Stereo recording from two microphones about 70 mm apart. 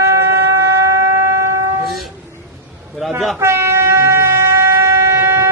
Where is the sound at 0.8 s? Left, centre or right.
Right.